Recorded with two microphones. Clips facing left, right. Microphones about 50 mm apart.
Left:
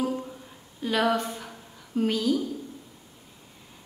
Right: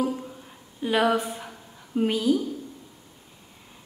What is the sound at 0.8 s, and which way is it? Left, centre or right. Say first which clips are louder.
A woman's voice: right 2 dB; centre.